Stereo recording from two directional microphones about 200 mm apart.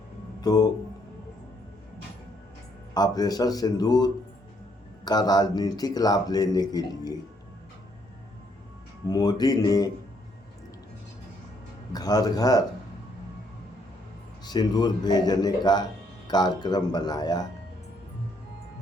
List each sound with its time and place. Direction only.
0.4 s speech: 20° left (ahead or behind)
2.9 s speech: 20° left (ahead or behind)
9.0 s speech: 20° left (ahead or behind)
11.9 s speech: 20° left (ahead or behind)
14.4 s speech: 20° left (ahead or behind)